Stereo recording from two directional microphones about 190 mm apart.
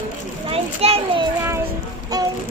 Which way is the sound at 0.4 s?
30° right (ahead or behind).